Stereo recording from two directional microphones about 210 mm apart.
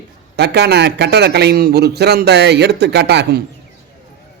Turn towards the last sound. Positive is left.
turn(degrees=-50)  # may be behind; listen again after turning